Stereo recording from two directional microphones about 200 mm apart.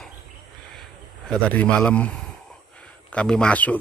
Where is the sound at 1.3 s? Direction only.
5° left (ahead or behind).